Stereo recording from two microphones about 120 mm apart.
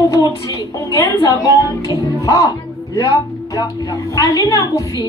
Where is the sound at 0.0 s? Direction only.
25° left (ahead or behind).